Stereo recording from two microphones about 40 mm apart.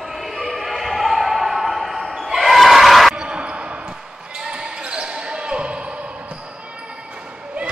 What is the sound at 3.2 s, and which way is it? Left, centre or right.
Basketball bounce, right.